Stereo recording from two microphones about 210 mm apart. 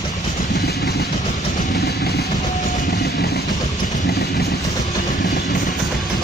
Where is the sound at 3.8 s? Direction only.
35° left (ahead or behind).